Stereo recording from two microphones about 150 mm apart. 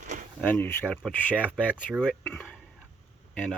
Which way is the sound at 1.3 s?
10° right (ahead or behind).